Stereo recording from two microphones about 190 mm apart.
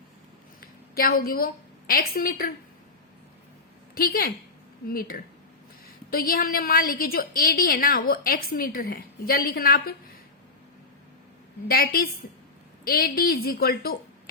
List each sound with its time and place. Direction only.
0.6 s a sound: 50° left (ahead or behind)
1.9 s a woman's voice: 50° left (ahead or behind)
3.9 s a woman's voice: 50° left (ahead or behind)
11.7 s a woman's voice: 55° left (ahead or behind)